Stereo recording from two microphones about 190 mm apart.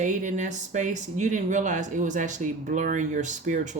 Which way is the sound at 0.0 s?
40° right (ahead or behind).